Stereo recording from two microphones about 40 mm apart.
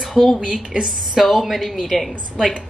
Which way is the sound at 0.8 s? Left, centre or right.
Centre.